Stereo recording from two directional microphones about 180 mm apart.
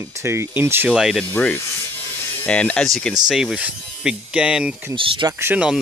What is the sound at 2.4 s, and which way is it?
Speech, 5° left (ahead or behind).